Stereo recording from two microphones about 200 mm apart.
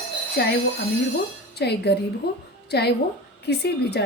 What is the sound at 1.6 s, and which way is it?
A woman's voice, 55° left (ahead or behind).